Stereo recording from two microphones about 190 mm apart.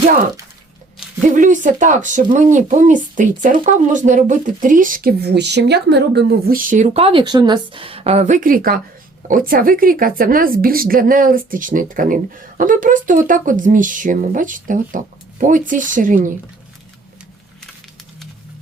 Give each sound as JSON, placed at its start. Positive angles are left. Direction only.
{"t": 1.3, "sound": "speech", "side_deg": -40}